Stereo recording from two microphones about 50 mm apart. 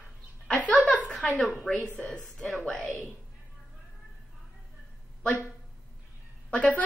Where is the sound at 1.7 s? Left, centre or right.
Centre.